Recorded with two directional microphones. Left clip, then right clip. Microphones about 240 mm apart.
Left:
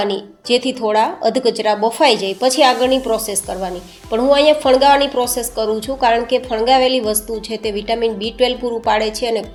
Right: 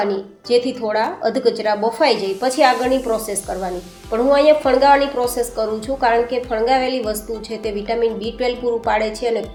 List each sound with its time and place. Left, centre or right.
0.4 s speech: left